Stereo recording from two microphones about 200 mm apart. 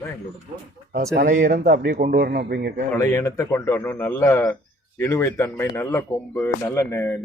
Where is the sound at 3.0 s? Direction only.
15° left (ahead or behind).